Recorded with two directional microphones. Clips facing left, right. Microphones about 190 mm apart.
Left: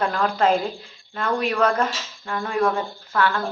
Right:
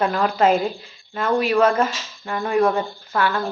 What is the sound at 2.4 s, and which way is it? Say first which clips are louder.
A woman's voice: right 4 dB; 20° right (ahead or behind).